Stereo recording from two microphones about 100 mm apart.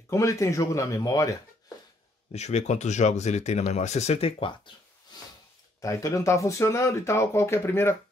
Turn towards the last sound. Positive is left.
turn(degrees=25)  # may be behind; listen again after turning